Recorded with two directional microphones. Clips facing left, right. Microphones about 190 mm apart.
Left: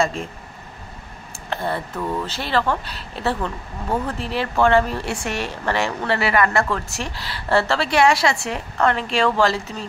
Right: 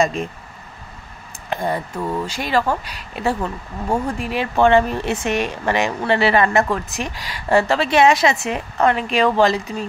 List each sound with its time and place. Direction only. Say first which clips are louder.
0.0 s speech: right 3 dB; 15° right (ahead or behind)
1.5 s speech: right 3 dB; 15° right (ahead or behind)